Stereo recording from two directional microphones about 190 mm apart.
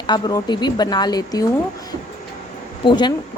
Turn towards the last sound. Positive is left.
turn(degrees=25)  # may be behind; listen again after turning